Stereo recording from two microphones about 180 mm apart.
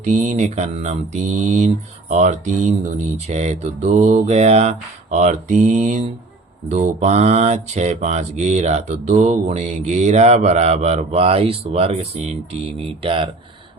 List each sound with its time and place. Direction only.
0.0 s mantra: 40° right (ahead or behind)